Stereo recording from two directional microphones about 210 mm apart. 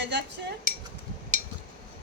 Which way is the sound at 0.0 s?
55° right (ahead or behind).